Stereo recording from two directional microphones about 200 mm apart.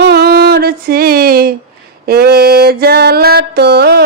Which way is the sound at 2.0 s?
55° right (ahead or behind).